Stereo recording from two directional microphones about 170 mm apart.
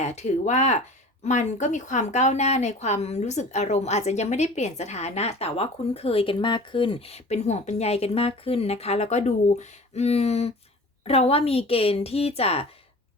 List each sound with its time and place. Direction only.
0.0 s speech: 40° left (ahead or behind)